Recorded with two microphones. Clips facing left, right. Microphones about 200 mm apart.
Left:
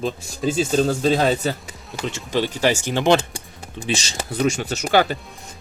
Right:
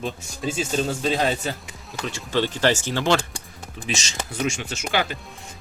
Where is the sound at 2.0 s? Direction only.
20° left (ahead or behind).